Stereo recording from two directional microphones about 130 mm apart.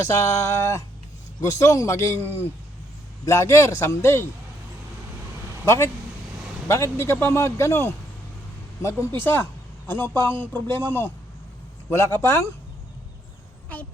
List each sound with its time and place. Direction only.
0.0 s speech: 25° left (ahead or behind)
3.2 s speech: 20° left (ahead or behind)
5.6 s speech: 20° left (ahead or behind)
9.2 s a sound: 15° left (ahead or behind)
10.2 s speech: 15° left (ahead or behind)
11.9 s speech: 20° left (ahead or behind)